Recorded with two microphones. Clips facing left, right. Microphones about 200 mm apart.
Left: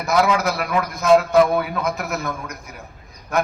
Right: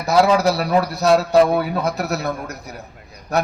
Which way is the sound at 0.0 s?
35° right (ahead or behind).